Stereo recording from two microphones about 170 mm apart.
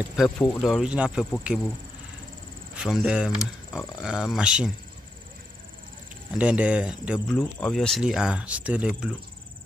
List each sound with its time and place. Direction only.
0.4 s speech: 10° left (ahead or behind)
0.7 s speech: 5° right (ahead or behind)
2.7 s speech: centre (ahead or behind)
6.3 s speech: 5° right (ahead or behind)